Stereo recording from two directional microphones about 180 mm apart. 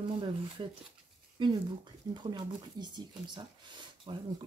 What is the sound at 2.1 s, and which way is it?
Speech, 25° right (ahead or behind).